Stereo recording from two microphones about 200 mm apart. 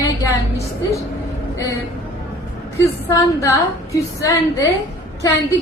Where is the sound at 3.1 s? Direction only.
15° left (ahead or behind).